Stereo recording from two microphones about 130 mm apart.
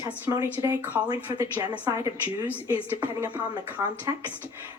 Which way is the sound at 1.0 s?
35° right (ahead or behind).